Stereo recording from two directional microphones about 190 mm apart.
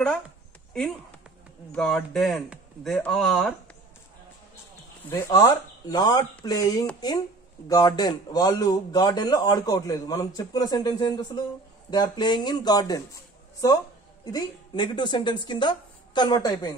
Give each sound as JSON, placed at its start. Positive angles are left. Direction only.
{"t": 1.7, "sound": "speech", "side_deg": 5}
{"t": 5.1, "sound": "speech", "side_deg": 15}
{"t": 14.3, "sound": "speech", "side_deg": 25}